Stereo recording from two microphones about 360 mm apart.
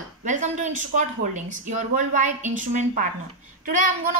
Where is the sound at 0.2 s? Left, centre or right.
Centre.